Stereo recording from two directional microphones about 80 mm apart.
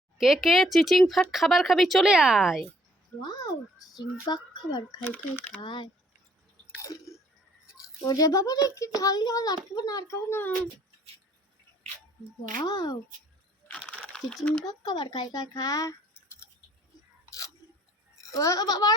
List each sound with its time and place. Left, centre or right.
0.2 s speech: centre
3.2 s speech: left
5.1 s speech: centre
5.5 s speech: left
6.8 s chewing: left
8.0 s a child's voice: left
10.2 s speech: left
12.6 s a child's voice: left
13.7 s a sound: centre
14.6 s a child's voice: left
18.3 s a child's voice: left